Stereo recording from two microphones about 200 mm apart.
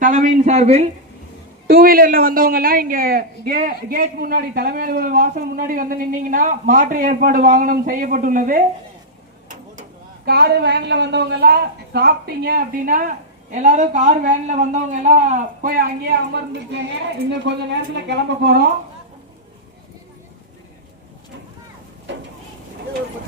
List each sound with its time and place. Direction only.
0.0 s speech: 40° right (ahead or behind)
1.6 s a woman's voice: 45° right (ahead or behind)
10.2 s a woman's voice: 55° right (ahead or behind)
16.3 s a woman's voice: 60° right (ahead or behind)
22.1 s a sound: 65° right (ahead or behind)